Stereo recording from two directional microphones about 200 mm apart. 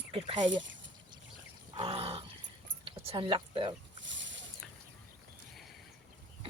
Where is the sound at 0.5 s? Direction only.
65° right (ahead or behind).